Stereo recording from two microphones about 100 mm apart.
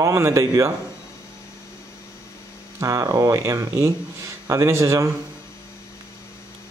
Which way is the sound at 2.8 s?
35° right (ahead or behind).